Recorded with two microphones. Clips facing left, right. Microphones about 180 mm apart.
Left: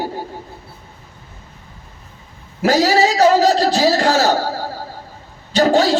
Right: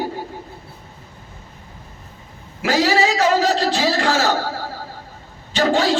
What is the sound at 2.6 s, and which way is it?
Speech, 40° left (ahead or behind).